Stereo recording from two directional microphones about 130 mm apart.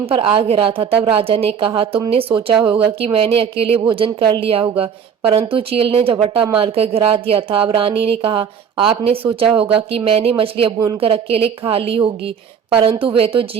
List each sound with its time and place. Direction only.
0.0 s speech: 45° right (ahead or behind)